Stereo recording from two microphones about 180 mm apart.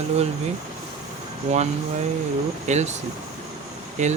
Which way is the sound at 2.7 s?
40° right (ahead or behind).